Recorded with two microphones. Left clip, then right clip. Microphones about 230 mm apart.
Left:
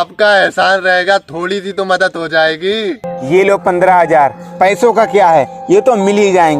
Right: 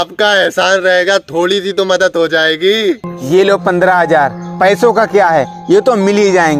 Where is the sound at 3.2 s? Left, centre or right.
Centre.